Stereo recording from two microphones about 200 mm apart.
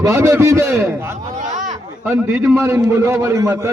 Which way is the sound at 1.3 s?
35° right (ahead or behind).